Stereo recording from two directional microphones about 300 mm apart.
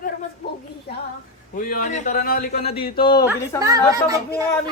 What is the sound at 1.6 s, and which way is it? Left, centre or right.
A woman's voice, left.